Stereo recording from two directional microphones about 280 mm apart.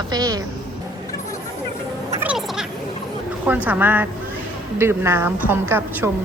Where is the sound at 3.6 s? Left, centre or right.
Centre.